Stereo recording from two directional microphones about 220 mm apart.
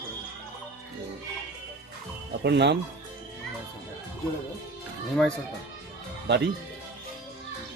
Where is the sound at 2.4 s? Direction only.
50° right (ahead or behind).